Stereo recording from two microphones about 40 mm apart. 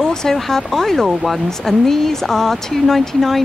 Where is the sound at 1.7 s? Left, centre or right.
Centre.